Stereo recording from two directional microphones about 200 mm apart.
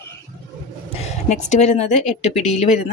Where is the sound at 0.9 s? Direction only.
35° left (ahead or behind).